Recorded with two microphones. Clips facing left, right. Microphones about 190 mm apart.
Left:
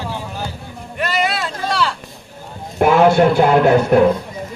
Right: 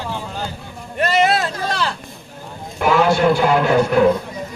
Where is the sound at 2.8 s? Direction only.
55° left (ahead or behind).